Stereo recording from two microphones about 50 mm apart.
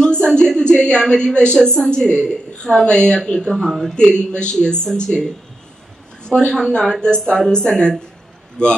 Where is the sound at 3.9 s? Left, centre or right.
Centre.